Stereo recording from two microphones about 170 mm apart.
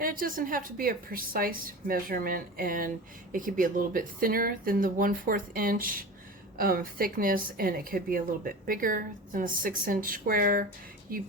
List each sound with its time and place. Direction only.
0.0 s a woman's voice: 55° right (ahead or behind)